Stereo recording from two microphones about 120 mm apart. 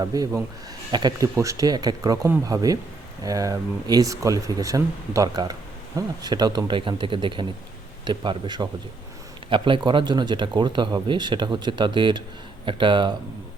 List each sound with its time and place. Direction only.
0.0 s speech: 30° right (ahead or behind)